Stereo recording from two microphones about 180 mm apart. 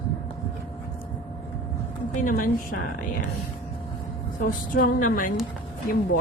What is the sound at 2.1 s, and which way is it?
Speech, 50° left (ahead or behind).